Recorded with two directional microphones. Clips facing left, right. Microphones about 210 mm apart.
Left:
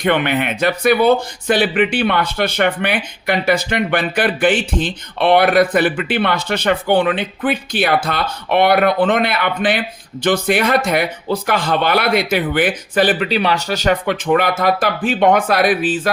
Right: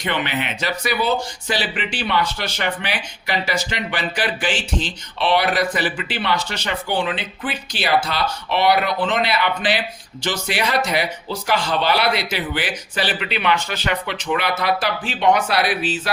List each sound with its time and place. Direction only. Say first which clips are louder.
0.0 s speech: left 7 dB; 55° left (ahead or behind)